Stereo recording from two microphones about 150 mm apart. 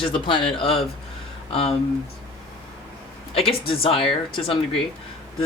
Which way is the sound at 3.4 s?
40° left (ahead or behind).